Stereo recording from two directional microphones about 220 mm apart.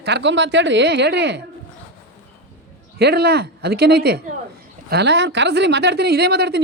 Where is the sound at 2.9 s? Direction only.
50° right (ahead or behind).